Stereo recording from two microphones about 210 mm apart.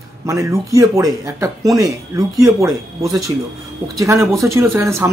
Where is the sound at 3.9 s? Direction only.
15° right (ahead or behind).